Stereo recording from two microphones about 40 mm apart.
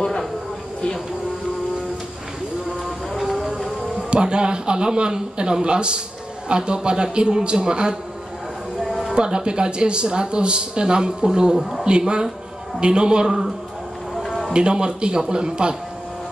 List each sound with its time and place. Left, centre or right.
2.8 s music: centre
4.1 s a man's voice: right
9.1 s a man's voice: right
14.1 s a sound: centre
14.5 s a man's voice: right